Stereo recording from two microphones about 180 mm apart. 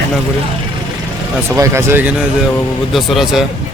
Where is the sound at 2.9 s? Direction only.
Centre (ahead or behind).